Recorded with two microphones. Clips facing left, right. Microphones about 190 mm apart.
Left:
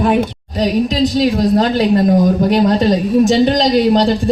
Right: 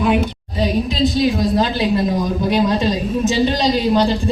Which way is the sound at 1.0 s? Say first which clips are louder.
Even; 45° left (ahead or behind).